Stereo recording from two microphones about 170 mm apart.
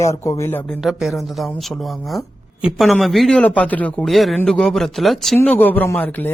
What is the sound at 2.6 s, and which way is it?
A man's voice, centre (ahead or behind).